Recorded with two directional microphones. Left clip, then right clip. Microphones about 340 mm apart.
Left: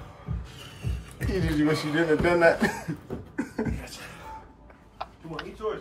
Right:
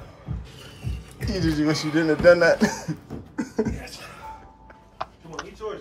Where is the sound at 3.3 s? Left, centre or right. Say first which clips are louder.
Right 5 dB; centre.